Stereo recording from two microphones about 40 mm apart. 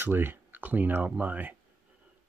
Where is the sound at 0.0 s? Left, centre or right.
Right.